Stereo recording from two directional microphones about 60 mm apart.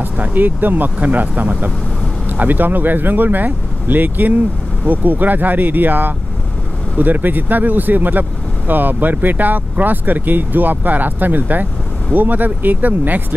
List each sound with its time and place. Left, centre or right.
0.0 s speech: right